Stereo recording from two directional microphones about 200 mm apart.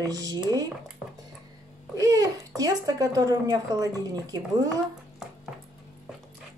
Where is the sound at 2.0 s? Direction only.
20° right (ahead or behind).